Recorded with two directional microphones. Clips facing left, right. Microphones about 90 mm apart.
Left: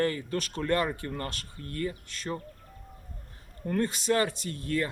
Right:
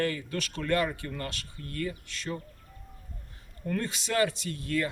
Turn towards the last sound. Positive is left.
turn(degrees=40)  # may be behind; listen again after turning